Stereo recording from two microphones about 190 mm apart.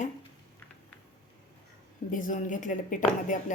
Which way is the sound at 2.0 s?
45° left (ahead or behind).